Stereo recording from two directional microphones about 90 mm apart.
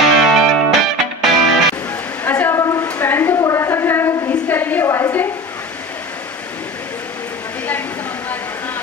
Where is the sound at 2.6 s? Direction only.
40° left (ahead or behind).